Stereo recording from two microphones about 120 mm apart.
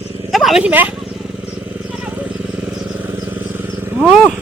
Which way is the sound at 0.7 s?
15° right (ahead or behind).